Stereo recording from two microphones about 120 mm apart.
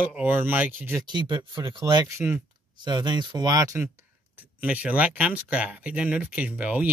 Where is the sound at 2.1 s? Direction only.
20° right (ahead or behind).